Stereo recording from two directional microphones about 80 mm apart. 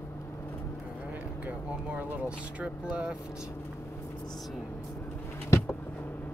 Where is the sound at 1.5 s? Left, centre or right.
Right.